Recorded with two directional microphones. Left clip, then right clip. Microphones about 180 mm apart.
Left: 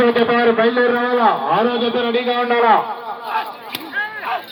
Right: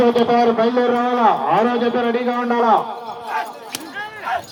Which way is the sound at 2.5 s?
30° left (ahead or behind).